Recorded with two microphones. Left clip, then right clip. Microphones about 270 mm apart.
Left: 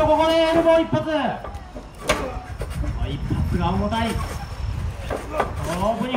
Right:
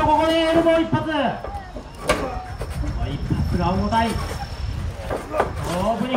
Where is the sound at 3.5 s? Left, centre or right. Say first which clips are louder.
Right 3 dB; centre.